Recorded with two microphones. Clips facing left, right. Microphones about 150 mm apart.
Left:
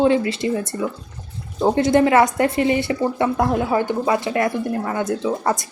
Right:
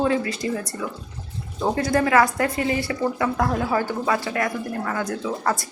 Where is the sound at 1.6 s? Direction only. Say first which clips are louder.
Left 6 dB; 25° left (ahead or behind).